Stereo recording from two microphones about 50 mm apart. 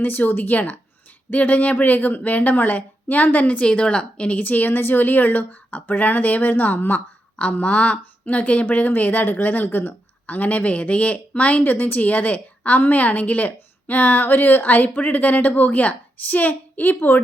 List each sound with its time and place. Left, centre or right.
0.0 s speech: left
3.7 s speech: left
7.3 s speech: left